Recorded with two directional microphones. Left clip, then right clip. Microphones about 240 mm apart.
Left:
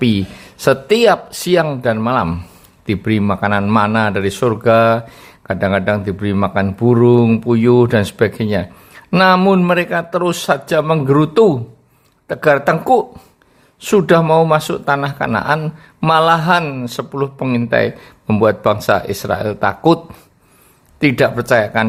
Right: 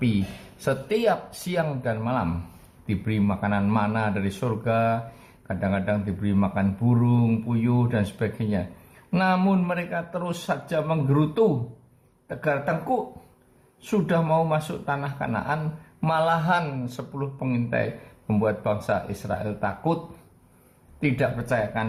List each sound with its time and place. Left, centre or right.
0.6 s speech: left
21.0 s speech: left